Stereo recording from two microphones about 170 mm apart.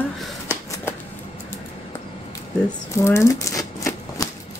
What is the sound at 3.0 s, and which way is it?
Typewriter, 15° left (ahead or behind).